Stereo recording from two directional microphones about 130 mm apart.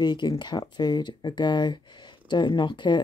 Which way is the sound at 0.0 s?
35° left (ahead or behind).